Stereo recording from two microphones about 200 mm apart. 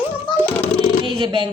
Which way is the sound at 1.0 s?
25° right (ahead or behind).